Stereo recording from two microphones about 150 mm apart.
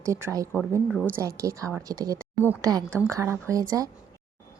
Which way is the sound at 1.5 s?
20° right (ahead or behind).